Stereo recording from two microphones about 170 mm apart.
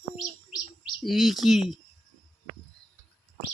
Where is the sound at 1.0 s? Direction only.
Centre (ahead or behind).